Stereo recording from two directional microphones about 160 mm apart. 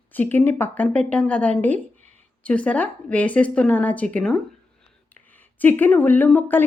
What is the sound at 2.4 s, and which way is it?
A woman's voice, 10° left (ahead or behind).